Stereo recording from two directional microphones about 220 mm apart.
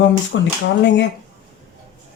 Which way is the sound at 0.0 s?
55° left (ahead or behind).